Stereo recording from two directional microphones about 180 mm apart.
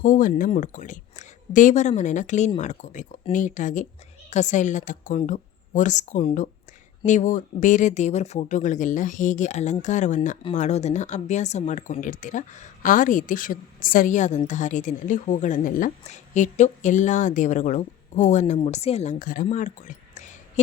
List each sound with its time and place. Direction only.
0.0 s speech: 50° left (ahead or behind)